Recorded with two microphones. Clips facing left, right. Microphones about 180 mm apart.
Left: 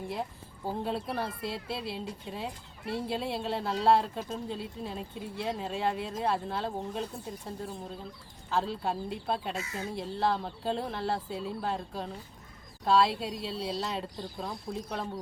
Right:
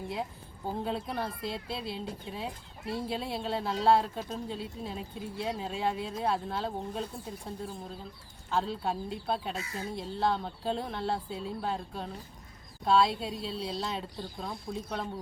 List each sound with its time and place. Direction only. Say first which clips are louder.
0.1 s speech: even; centre (ahead or behind)